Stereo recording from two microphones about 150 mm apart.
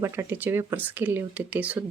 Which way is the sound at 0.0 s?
15° right (ahead or behind).